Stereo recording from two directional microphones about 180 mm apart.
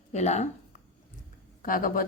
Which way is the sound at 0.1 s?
40° left (ahead or behind).